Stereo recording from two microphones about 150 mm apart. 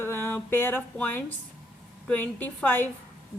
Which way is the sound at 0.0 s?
15° left (ahead or behind).